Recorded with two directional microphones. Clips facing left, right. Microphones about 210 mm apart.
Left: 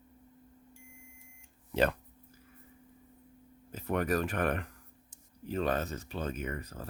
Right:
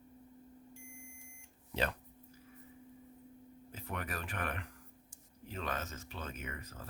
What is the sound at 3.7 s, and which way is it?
Speech, 45° left (ahead or behind).